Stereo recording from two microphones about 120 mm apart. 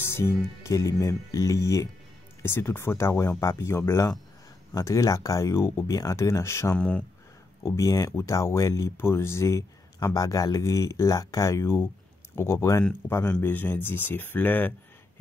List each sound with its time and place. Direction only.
0.0 s speech: 20° left (ahead or behind)
6.8 s speech: 10° left (ahead or behind)
7.6 s speech: 25° left (ahead or behind)